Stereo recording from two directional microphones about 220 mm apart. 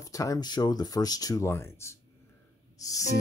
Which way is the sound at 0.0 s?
15° left (ahead or behind).